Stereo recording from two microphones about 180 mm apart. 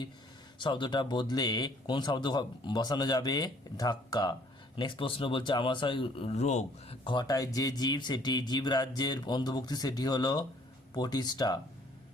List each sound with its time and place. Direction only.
0.6 s a man's voice: 25° left (ahead or behind)
7.0 s a man's voice: 25° left (ahead or behind)